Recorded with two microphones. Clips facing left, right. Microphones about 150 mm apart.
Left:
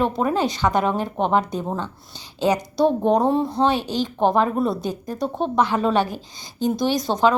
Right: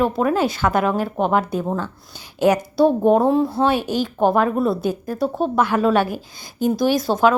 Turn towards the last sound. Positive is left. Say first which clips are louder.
# right 2 dB
turn(degrees=-5)  # may be behind; listen again after turning